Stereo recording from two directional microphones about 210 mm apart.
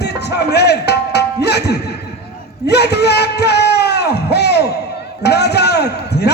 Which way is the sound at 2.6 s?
50° left (ahead or behind).